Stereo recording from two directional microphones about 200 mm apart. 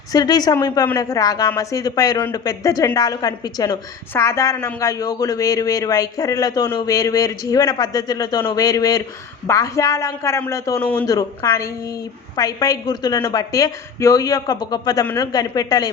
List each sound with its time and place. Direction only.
0.1 s a woman's voice: 20° left (ahead or behind)